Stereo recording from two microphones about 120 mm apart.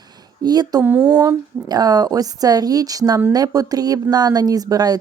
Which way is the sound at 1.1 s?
30° right (ahead or behind).